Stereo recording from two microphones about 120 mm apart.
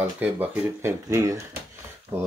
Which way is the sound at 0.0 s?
15° right (ahead or behind).